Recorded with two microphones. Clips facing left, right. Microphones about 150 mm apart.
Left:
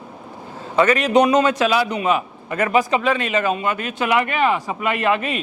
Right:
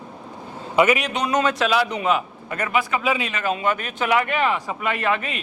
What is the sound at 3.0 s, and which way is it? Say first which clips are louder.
Speech: left 3 dB; 5° right (ahead or behind).